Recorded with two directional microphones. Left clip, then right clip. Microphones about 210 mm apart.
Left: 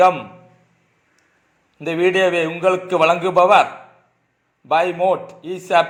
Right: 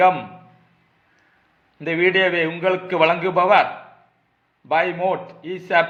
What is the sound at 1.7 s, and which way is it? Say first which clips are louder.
A man's voice: left 1 dB; 15° left (ahead or behind).